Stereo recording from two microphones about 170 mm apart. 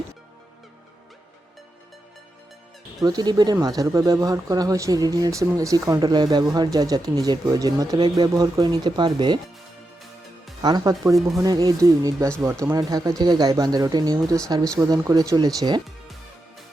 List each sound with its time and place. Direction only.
3.0 s speech: 25° right (ahead or behind)
10.6 s speech: 25° right (ahead or behind)